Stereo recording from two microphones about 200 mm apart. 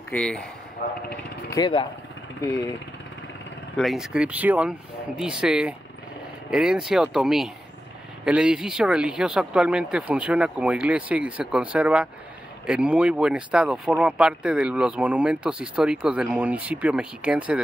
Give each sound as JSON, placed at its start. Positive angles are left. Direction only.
{"t": 0.1, "sound": "speech", "side_deg": 5}
{"t": 0.8, "sound": "speech", "side_deg": 50}
{"t": 1.5, "sound": "speech", "side_deg": 25}
{"t": 3.7, "sound": "speech", "side_deg": 0}